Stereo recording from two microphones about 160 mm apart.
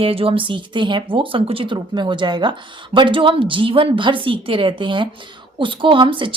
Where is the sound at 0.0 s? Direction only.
35° right (ahead or behind).